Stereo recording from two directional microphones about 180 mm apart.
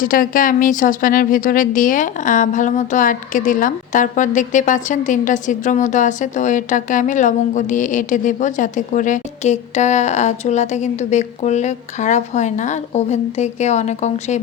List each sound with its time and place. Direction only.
0.0 s speech: 50° left (ahead or behind)